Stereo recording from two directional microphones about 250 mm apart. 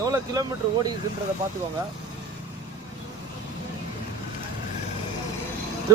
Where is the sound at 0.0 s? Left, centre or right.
Centre.